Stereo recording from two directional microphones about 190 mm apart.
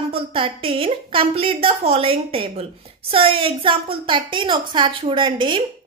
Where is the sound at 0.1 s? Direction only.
30° right (ahead or behind).